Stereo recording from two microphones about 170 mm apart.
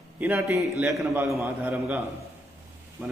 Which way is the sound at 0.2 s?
10° right (ahead or behind).